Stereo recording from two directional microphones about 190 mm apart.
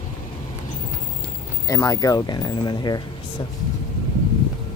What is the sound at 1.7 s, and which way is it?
Speech, 15° left (ahead or behind).